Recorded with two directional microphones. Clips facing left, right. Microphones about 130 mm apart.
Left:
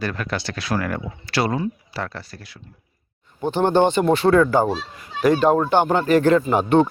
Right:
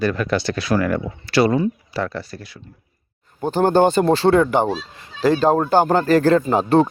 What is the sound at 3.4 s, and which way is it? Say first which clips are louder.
Speech: right 2 dB; 40° right (ahead or behind).